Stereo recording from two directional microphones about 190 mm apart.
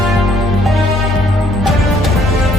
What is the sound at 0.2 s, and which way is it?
Music, centre (ahead or behind).